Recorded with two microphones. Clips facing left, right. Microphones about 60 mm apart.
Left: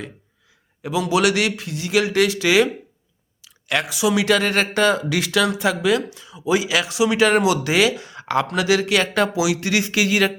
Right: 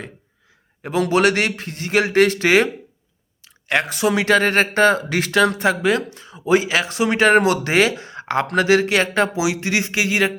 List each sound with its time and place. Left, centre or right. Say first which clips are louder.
0.8 s speech: right 2 dB; right
3.4 s a sound: right 3 dB; right
3.8 s speech: left 1 dB; right